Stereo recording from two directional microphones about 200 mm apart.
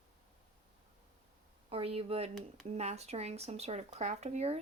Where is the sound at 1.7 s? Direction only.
30° right (ahead or behind).